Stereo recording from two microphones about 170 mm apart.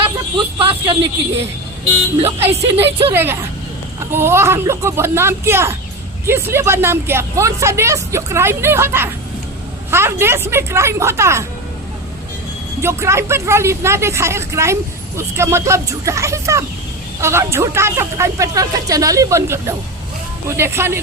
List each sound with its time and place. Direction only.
0.0 s a sound: 30° right (ahead or behind)
2.5 s speech: 35° right (ahead or behind)
3.1 s speech: 15° right (ahead or behind)
12.8 s speech: 15° right (ahead or behind)